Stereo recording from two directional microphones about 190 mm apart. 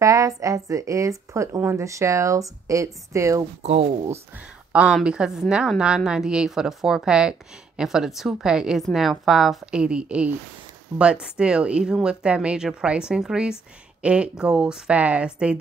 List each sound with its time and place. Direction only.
0.0 s speech: 15° right (ahead or behind)
3.6 s speech: 30° right (ahead or behind)
4.7 s a woman's voice: 5° right (ahead or behind)